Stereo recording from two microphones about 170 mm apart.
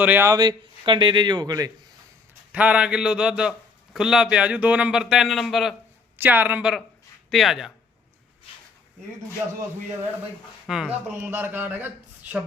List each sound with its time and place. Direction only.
0.0 s a man's voice: 10° right (ahead or behind)
2.5 s a man's voice: 10° right (ahead or behind)
6.1 s speech: 10° right (ahead or behind)
10.7 s a man's voice: 5° right (ahead or behind)
11.1 s speech: 15° right (ahead or behind)